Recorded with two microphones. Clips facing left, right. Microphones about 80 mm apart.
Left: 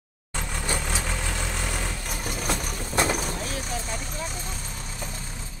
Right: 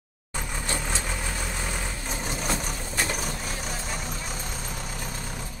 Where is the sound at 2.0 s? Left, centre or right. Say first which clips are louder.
Right 1 dB; centre.